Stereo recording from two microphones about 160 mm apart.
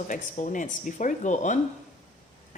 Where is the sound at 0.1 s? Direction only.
50° left (ahead or behind).